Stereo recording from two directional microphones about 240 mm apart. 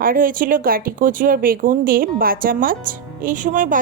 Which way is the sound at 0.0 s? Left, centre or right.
Right.